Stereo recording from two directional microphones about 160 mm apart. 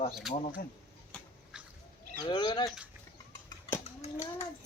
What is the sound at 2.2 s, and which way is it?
Speech, 25° left (ahead or behind).